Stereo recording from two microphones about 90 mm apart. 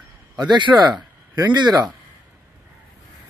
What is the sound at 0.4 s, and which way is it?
Speech, 55° right (ahead or behind).